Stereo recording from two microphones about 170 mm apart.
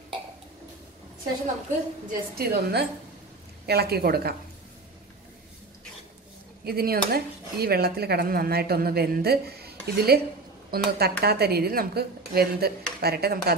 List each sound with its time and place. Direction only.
2.0 s speech: 65° right (ahead or behind)
6.6 s speech: 65° right (ahead or behind)